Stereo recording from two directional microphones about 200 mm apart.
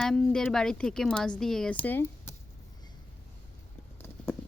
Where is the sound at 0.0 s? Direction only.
Centre (ahead or behind).